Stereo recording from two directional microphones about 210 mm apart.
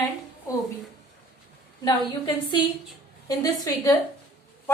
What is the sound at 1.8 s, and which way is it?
A woman's voice, 20° left (ahead or behind).